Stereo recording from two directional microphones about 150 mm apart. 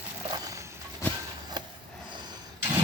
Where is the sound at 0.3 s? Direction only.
25° right (ahead or behind).